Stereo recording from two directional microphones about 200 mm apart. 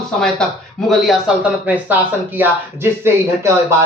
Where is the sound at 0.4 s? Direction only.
5° left (ahead or behind); by 3.8 s 15° right (ahead or behind).